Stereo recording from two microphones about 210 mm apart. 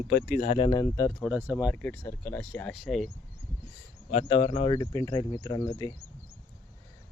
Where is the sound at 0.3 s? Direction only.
35° left (ahead or behind); by 1.1 s 15° left (ahead or behind).